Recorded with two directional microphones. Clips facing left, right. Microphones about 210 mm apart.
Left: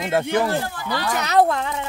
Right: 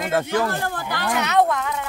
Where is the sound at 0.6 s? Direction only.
55° right (ahead or behind).